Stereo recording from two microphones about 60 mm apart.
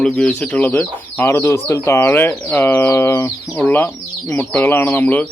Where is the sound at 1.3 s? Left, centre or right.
Left.